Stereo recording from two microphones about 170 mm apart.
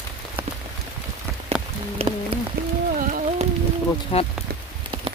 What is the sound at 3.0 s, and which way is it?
Music, 50° right (ahead or behind).